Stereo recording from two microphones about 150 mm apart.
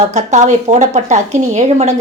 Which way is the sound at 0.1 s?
50° right (ahead or behind).